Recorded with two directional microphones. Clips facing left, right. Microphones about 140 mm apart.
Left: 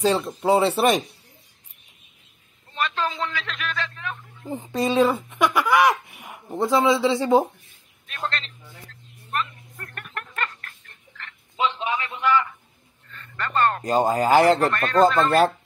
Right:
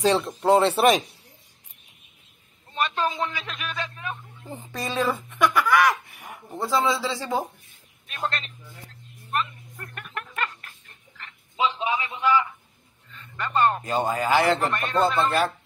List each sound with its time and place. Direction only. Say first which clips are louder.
0.0 s speech: even; centre (ahead or behind)
2.7 s a man's voice: right 1 dB; 15° right (ahead or behind)
4.5 s speech: left 8 dB; 20° left (ahead or behind)
8.2 s a man's voice: even; 15° right (ahead or behind)
9.8 s music: even; 5° right (ahead or behind)
11.1 s a sound: even; 10° right (ahead or behind)
13.1 s speech: even; 10° right (ahead or behind)
13.8 s speech: left 4 dB; 40° left (ahead or behind)